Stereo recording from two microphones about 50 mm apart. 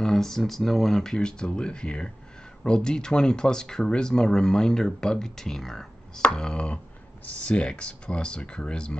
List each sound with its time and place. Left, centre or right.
0.0 s speech: centre
6.3 s speech: centre